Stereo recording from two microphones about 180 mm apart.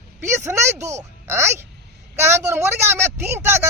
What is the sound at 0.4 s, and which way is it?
A man's voice, 15° right (ahead or behind).